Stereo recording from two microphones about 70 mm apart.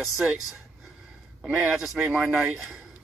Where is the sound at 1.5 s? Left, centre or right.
Centre.